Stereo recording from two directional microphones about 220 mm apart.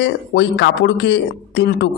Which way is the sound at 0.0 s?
50° left (ahead or behind).